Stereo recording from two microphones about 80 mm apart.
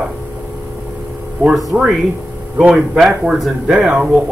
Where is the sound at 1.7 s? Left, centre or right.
Centre.